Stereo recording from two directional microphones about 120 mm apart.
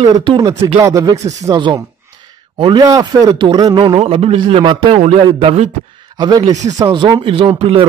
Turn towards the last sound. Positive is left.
turn(degrees=-50)  # may be behind; listen again after turning